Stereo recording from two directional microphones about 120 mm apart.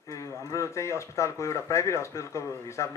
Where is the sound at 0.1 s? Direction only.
25° left (ahead or behind).